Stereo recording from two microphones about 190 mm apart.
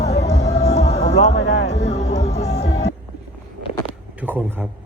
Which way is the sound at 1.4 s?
65° left (ahead or behind).